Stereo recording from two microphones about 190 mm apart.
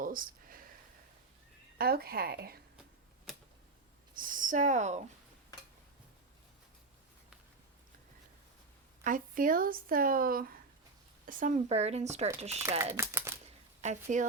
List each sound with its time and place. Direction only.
0.0 s a sound: 45° right (ahead or behind)
1.8 s speech: 55° right (ahead or behind)
3.3 s tick-tock: centre (ahead or behind)
4.1 s speech: 45° right (ahead or behind)
9.0 s speech: 45° right (ahead or behind)
12.8 s a sound: 15° right (ahead or behind)
13.8 s speech: 40° right (ahead or behind)